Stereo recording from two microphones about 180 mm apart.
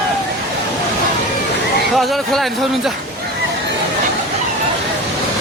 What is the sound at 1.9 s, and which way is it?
Speech, centre (ahead or behind).